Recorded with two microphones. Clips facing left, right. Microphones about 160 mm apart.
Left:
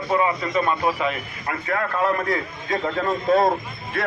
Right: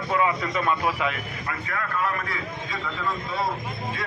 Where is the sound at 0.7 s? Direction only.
35° left (ahead or behind).